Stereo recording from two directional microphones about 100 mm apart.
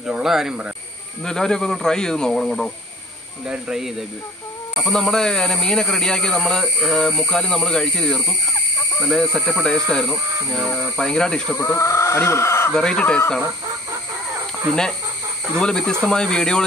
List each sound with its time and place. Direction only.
0.0 s a man's voice: 5° right (ahead or behind)
1.2 s a man's voice: 5° left (ahead or behind)
11.5 s speech: 25° left (ahead or behind)
12.7 s speech: 5° left (ahead or behind)
14.7 s speech: 5° left (ahead or behind)